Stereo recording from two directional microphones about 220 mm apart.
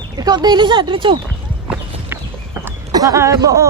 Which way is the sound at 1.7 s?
10° right (ahead or behind).